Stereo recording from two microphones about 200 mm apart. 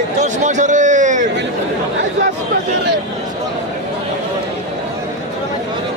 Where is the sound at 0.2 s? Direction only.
35° right (ahead or behind).